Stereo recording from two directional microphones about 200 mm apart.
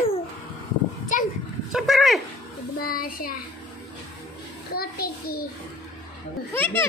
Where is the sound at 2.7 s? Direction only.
45° left (ahead or behind).